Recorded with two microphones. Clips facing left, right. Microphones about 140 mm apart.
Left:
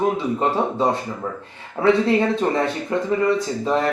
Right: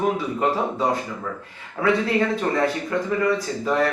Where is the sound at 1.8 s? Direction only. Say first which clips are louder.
Left 4 dB; 25° left (ahead or behind).